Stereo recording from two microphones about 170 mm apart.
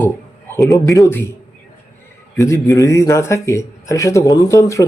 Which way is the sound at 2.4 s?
15° left (ahead or behind).